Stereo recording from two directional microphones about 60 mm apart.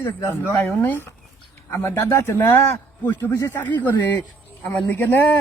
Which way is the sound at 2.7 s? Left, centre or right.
Left.